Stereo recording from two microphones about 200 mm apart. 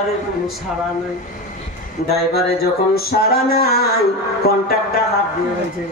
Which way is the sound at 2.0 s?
50° left (ahead or behind).